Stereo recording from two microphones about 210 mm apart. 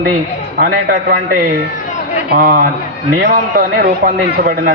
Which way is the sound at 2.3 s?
45° right (ahead or behind).